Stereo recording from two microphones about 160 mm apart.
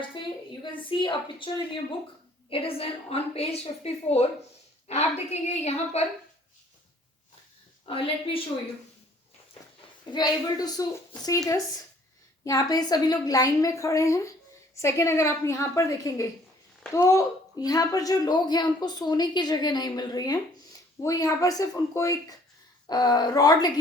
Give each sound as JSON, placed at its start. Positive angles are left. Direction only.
{"t": 0.2, "sound": "a sound", "side_deg": 30}
{"t": 0.9, "sound": "a woman's voice", "side_deg": 30}
{"t": 7.9, "sound": "a woman's voice", "side_deg": 35}
{"t": 10.1, "sound": "a woman's voice", "side_deg": 25}